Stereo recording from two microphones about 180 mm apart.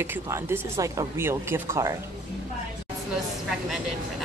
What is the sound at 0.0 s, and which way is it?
Speech, 15° right (ahead or behind).